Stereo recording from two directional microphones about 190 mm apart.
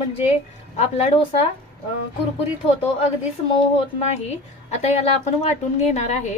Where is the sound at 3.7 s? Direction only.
35° left (ahead or behind).